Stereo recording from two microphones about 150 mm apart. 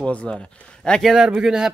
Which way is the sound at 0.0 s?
5° left (ahead or behind).